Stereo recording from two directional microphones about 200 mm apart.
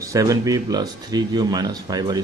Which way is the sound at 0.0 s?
15° right (ahead or behind).